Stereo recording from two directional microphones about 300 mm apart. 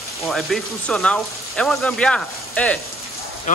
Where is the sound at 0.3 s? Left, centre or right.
Centre.